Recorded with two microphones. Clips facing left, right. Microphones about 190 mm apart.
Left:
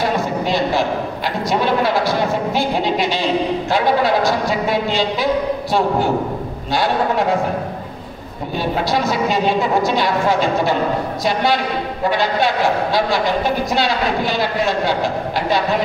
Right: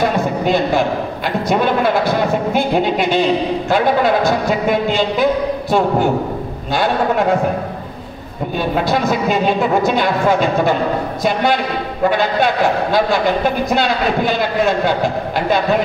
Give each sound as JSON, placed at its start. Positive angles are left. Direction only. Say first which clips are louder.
{"t": 0.0, "sound": "a sound", "louder": "right 3 dB", "side_deg": -50}
{"t": 1.5, "sound": "a woman's voice", "louder": "right 2 dB", "side_deg": -50}
{"t": 8.5, "sound": "a woman's voice", "louder": "right 2 dB", "side_deg": -50}